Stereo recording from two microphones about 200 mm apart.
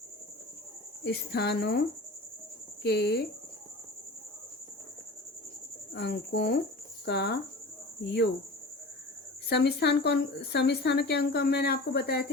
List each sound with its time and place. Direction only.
1.0 s a woman's voice: 55° left (ahead or behind)
2.8 s a woman's voice: 55° left (ahead or behind)
5.9 s a woman's voice: 60° left (ahead or behind)
9.5 s a woman's voice: 55° left (ahead or behind)